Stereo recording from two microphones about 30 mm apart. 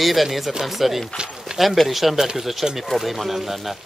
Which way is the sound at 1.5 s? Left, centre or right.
Right.